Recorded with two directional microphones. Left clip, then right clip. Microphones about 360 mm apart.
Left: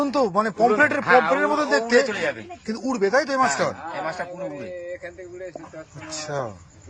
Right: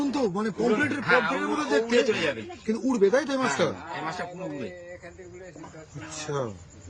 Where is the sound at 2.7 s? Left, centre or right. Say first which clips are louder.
Even; centre.